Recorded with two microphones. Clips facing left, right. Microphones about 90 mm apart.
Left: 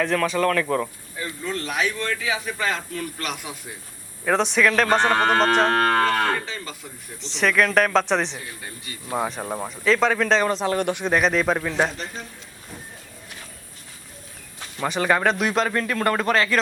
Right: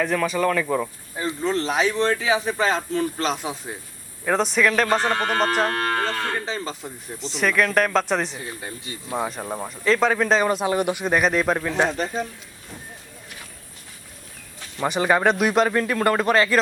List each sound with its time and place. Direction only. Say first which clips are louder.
0.0 s speech: even; 5° right (ahead or behind)
1.1 s speech: right 7 dB; 30° right (ahead or behind)
4.3 s speech: even; centre (ahead or behind)
4.9 s speech: left 3 dB; 40° left (ahead or behind)
5.7 s moo: left 5 dB; 55° left (ahead or behind)
6.4 s speech: right 5 dB; 30° right (ahead or behind)
7.3 s speech: left 1 dB; 5° right (ahead or behind)
8.4 s speech: right 3 dB; 25° right (ahead or behind)
9.1 s speech: left 1 dB; 5° left (ahead or behind)
11.9 s speech: right 8 dB; 45° right (ahead or behind)
14.8 s speech: right 1 dB; 10° right (ahead or behind)